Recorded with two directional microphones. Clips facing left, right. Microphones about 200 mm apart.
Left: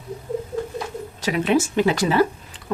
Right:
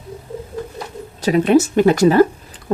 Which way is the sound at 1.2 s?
40° right (ahead or behind).